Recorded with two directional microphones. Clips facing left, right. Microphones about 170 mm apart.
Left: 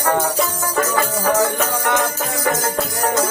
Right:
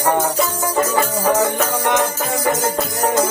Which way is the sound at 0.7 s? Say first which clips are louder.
Right 1 dB; 20° right (ahead or behind).